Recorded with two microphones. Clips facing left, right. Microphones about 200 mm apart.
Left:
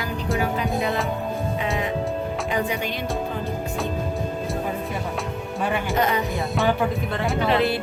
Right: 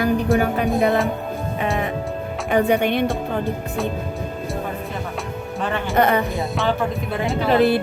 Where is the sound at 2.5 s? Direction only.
60° right (ahead or behind).